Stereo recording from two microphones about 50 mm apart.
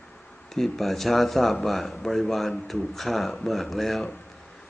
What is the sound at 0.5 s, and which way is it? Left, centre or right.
A man's voice, centre.